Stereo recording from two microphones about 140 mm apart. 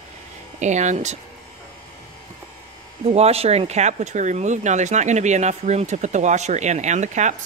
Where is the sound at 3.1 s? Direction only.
45° right (ahead or behind).